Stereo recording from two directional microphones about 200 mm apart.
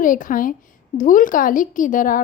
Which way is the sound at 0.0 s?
40° left (ahead or behind).